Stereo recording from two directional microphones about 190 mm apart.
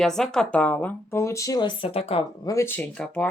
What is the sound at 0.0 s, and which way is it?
Speech, centre (ahead or behind).